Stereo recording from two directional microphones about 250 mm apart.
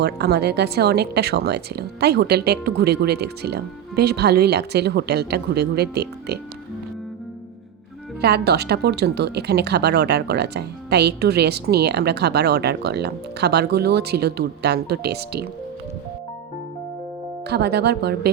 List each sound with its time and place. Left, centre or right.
0.0 s speech: right
8.2 s speech: right
17.5 s speech: right